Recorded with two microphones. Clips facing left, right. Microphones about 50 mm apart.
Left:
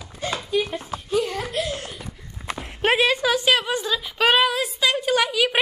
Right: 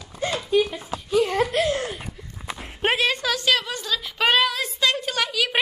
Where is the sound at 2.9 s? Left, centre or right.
Centre.